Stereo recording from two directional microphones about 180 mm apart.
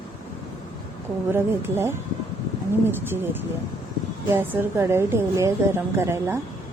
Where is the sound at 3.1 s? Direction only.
10° right (ahead or behind).